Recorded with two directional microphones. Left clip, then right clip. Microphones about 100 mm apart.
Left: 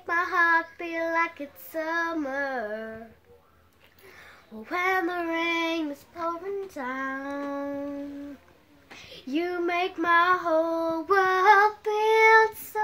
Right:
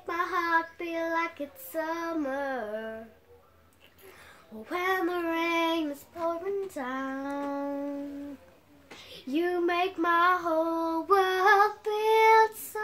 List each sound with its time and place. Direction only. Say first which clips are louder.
0.0 s child singing: left 6 dB; 20° left (ahead or behind)
1.7 s female singing: left 4 dB; 25° left (ahead or behind)
4.6 s female singing: left 3 dB; 20° left (ahead or behind)
6.7 s child singing: left 3 dB; 5° right (ahead or behind)
9.3 s female singing: even; 30° left (ahead or behind)
10.5 s child singing: left 3 dB; 20° left (ahead or behind)